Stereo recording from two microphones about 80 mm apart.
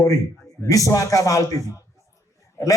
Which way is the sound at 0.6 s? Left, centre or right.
Left.